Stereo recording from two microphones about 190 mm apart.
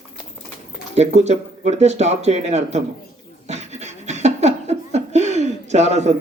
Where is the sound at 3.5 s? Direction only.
35° right (ahead or behind).